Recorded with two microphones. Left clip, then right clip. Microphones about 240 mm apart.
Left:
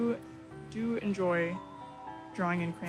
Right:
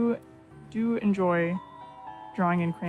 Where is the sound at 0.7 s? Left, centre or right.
Right.